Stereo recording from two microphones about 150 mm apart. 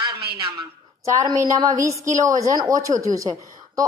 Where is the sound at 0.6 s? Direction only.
20° right (ahead or behind).